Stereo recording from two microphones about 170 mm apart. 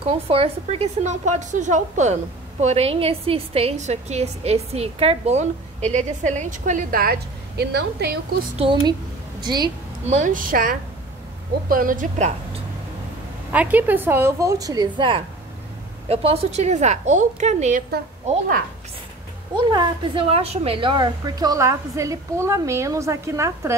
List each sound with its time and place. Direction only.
0.0 s a woman's voice: 35° right (ahead or behind); by 8.4 s 75° right (ahead or behind)
8.5 s a woman's voice: 30° right (ahead or behind)
10.0 s a woman's voice: 45° right (ahead or behind)
13.5 s a woman's voice: 10° right (ahead or behind); by 18.6 s 40° right (ahead or behind)
19.7 s a woman's voice: 30° right (ahead or behind)